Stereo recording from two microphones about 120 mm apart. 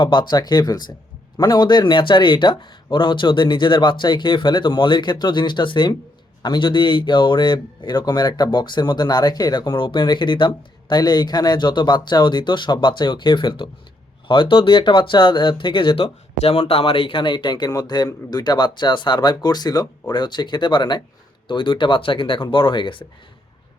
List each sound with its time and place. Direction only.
0.0 s speech: 40° left (ahead or behind)